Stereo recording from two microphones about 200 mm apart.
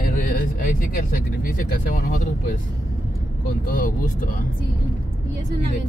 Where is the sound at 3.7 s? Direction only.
45° left (ahead or behind).